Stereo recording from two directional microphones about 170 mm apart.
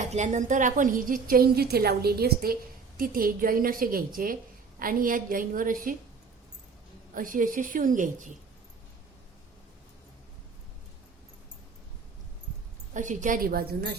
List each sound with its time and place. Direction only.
0.0 s a woman's voice: 45° right (ahead or behind)
7.1 s a woman's voice: 50° right (ahead or behind)
12.9 s a woman's voice: 45° right (ahead or behind); by 13.9 s 65° right (ahead or behind)